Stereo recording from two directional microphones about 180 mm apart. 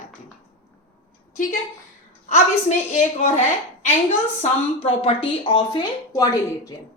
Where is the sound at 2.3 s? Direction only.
40° left (ahead or behind); by 6.4 s 20° left (ahead or behind).